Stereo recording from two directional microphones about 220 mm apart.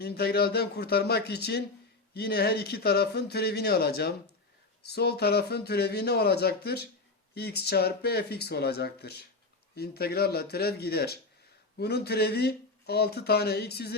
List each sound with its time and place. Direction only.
0.0 s speech: 45° left (ahead or behind)